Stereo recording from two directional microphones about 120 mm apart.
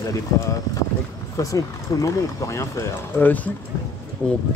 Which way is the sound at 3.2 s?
15° left (ahead or behind).